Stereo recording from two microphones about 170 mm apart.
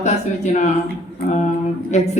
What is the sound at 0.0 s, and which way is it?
Speech, 40° left (ahead or behind).